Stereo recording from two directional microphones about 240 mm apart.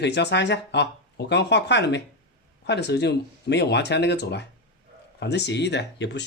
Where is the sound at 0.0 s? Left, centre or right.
Left.